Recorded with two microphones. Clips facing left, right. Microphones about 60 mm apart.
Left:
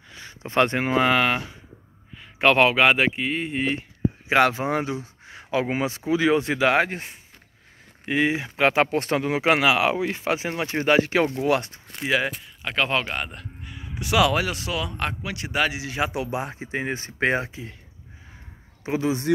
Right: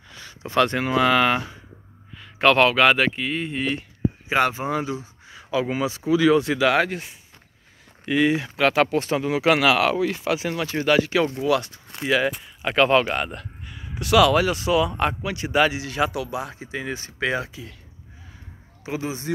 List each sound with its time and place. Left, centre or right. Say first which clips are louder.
0.3 s speech: right 1 dB; left
1.1 s speech: right 2 dB; centre
4.3 s speech: left 2 dB; left
8.0 s speech: right 2 dB; left
8.9 s speech: right 1 dB; left
9.6 s speech: right 1 dB; centre; by 11.8 s left
11.9 s speech: right 2 dB; centre
12.3 s speech: right 5 dB; centre
14.5 s speech: right 8 dB; centre
16.1 s speech: left 1 dB; left
18.9 s speech: left 5 dB; left